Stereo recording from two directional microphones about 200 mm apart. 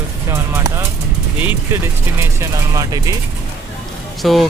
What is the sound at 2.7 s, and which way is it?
Speech, 20° right (ahead or behind).